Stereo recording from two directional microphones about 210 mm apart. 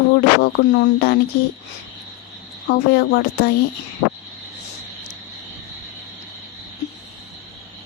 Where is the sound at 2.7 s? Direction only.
50° left (ahead or behind).